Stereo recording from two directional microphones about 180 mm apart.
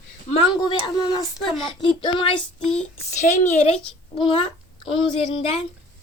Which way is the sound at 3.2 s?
40° left (ahead or behind).